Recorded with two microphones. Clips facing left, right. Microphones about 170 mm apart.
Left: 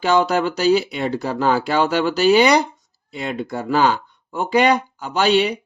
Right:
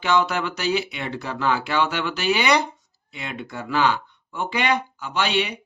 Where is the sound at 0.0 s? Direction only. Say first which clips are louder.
Left 5 dB; 40° left (ahead or behind).